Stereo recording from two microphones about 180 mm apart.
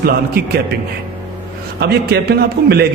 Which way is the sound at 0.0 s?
60° right (ahead or behind).